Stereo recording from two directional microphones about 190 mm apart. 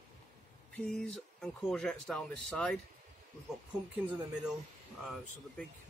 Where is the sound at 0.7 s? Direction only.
5° left (ahead or behind).